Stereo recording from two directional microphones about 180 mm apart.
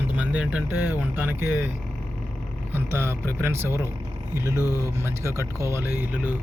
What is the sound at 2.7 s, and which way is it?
Speech, 15° right (ahead or behind).